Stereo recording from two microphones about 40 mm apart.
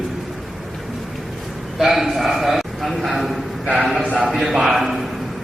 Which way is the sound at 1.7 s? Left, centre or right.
Centre.